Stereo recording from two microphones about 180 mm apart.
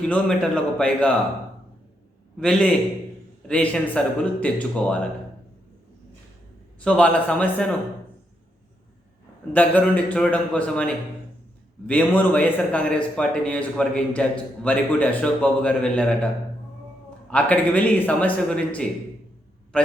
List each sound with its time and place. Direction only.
0.0 s a man's voice: 5° left (ahead or behind)
2.4 s a man's voice: 5° left (ahead or behind)
6.7 s a man's voice: 5° left (ahead or behind)
9.5 s a man's voice: 10° left (ahead or behind)
17.3 s a man's voice: 10° left (ahead or behind)